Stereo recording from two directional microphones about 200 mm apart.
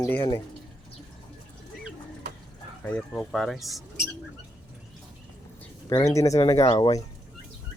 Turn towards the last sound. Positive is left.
turn(degrees=20)  # may be behind; listen again after turning